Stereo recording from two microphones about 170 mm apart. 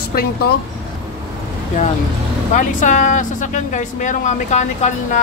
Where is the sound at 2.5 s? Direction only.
45° left (ahead or behind).